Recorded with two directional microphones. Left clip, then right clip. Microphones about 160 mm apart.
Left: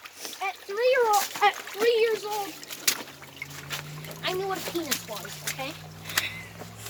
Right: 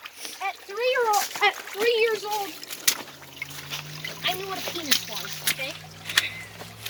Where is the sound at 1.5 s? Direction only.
20° left (ahead or behind).